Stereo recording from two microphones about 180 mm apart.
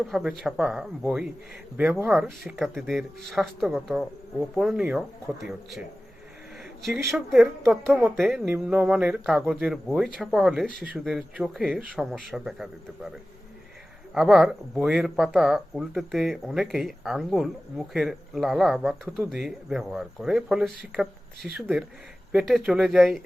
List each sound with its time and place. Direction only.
0.0 s speech: 5° right (ahead or behind)
7.1 s speech: centre (ahead or behind)
14.1 s speech: 5° right (ahead or behind)